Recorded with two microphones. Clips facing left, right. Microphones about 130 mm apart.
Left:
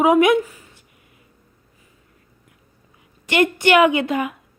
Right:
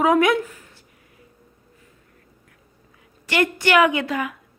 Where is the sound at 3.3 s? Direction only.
20° left (ahead or behind).